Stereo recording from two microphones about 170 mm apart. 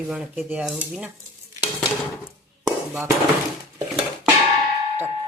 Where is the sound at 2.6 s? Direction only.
10° right (ahead or behind).